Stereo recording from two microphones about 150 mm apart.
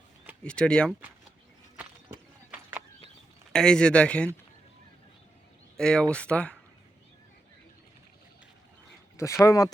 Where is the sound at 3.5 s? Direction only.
5° left (ahead or behind).